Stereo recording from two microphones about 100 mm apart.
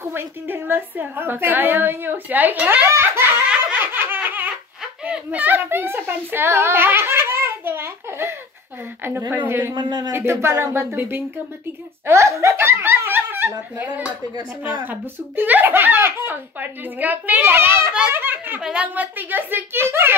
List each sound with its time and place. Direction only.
0.0 s a woman's voice: 25° right (ahead or behind)
3.7 s laughter: 20° right (ahead or behind)
5.0 s a sound: 15° right (ahead or behind)
9.3 s a woman's voice: 20° right (ahead or behind)
9.8 s speech: 45° right (ahead or behind)
10.1 s a woman's voice: 25° right (ahead or behind)
14.6 s a woman's voice: 20° right (ahead or behind)